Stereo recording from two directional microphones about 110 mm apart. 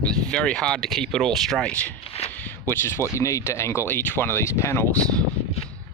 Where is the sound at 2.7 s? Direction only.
25° left (ahead or behind).